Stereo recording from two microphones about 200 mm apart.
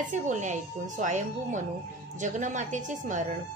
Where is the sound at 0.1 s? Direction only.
35° right (ahead or behind).